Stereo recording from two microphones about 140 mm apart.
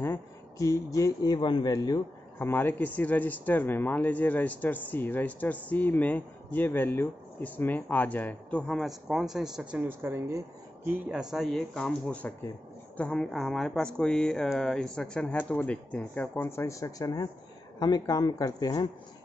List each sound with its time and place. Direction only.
0.0 s speech: 20° left (ahead or behind)
2.3 s a man's voice: 15° left (ahead or behind); by 11.0 s 15° right (ahead or behind)
11.1 s a man's voice: 5° right (ahead or behind); by 18.9 s 25° left (ahead or behind)